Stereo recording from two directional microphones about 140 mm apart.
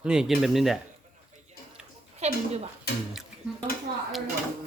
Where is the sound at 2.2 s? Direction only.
50° right (ahead or behind).